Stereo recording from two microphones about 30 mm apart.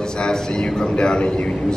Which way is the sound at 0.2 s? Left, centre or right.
Left.